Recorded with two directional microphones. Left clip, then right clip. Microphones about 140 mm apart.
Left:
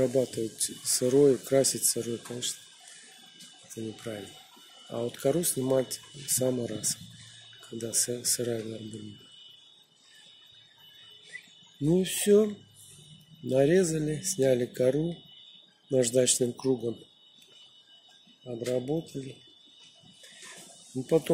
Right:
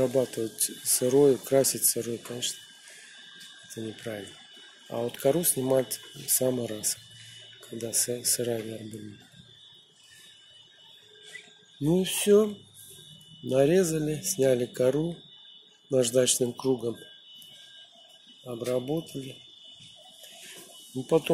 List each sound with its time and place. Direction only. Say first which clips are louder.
0.0 s speech: right 1 dB; 10° left (ahead or behind)
3.7 s speech: right 1 dB; centre (ahead or behind)
11.8 s speech: right 1 dB; 5° left (ahead or behind)
13.5 s speech: right 1 dB; 5° left (ahead or behind)
18.8 s speech: right 1 dB; centre (ahead or behind)